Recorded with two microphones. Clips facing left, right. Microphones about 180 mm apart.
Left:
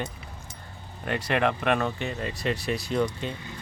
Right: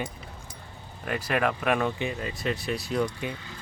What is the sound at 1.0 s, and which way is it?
Speech, 5° right (ahead or behind).